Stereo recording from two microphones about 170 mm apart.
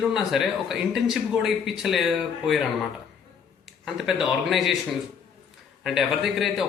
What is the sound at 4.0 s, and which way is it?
Speech, centre (ahead or behind).